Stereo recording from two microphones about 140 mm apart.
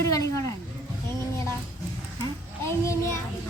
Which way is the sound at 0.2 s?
25° left (ahead or behind).